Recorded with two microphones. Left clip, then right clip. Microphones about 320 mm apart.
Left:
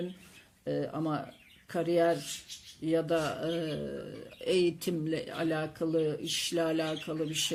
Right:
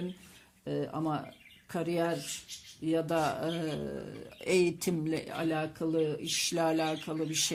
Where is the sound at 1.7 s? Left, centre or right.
Centre.